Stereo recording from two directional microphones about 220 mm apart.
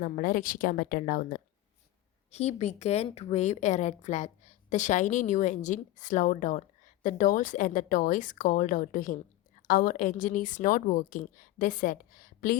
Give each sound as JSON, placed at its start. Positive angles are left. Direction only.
{"t": 0.0, "sound": "a woman's voice", "side_deg": 40}